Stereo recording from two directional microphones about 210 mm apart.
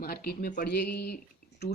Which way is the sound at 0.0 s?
45° left (ahead or behind).